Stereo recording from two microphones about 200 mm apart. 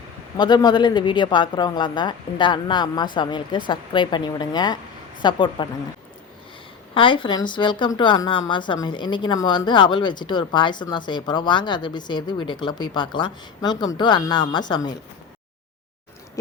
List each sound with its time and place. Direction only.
0.3 s a woman's voice: 20° left (ahead or behind)
6.9 s a woman's voice: 25° left (ahead or behind)